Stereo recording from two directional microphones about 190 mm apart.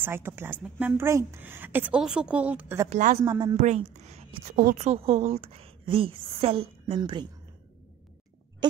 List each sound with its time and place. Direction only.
0.0 s a woman's voice: 10° right (ahead or behind)
2.9 s a woman's voice: 40° right (ahead or behind)
3.3 s speech: 20° right (ahead or behind)
3.5 s a woman's voice: 35° right (ahead or behind)
4.6 s a woman's voice: 50° right (ahead or behind)
4.8 s a woman's voice: 35° right (ahead or behind)